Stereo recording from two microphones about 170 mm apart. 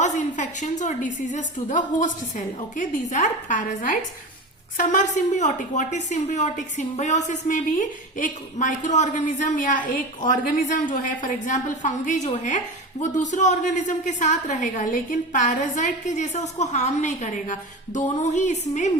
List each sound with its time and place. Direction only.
0.0 s a woman's voice: 45° left (ahead or behind)